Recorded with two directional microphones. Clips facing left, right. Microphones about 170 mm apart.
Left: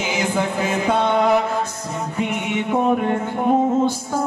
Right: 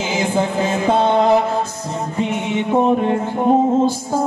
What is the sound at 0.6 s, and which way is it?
Music, 30° right (ahead or behind).